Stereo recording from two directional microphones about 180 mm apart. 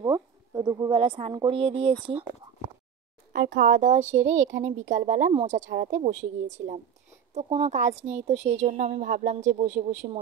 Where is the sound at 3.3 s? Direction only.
85° right.